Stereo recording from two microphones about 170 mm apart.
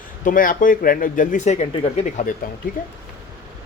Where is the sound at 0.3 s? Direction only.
55° left (ahead or behind).